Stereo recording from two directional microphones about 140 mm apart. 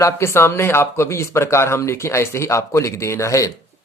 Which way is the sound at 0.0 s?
20° left (ahead or behind).